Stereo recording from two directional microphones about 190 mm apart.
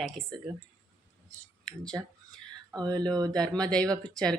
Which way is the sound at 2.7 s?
20° right (ahead or behind).